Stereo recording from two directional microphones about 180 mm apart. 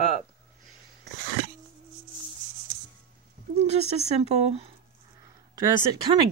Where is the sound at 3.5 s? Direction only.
35° right (ahead or behind).